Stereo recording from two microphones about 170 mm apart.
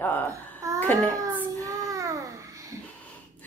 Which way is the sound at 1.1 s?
20° right (ahead or behind).